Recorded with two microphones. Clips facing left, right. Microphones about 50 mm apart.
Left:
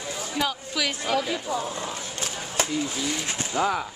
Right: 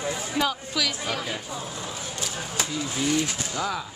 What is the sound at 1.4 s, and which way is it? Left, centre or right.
Speech, left.